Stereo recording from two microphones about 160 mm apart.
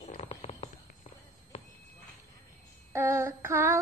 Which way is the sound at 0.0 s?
40° left (ahead or behind).